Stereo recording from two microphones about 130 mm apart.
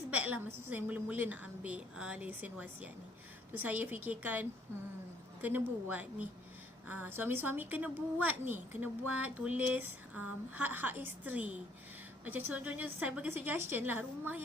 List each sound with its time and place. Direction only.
0.1 s a woman's voice: 10° right (ahead or behind)